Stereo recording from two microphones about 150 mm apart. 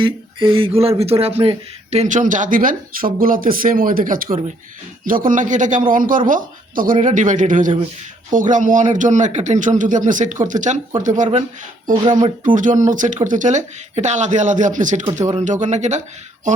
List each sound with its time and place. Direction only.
0.0 s speech: 35° right (ahead or behind); by 16.0 s 50° right (ahead or behind)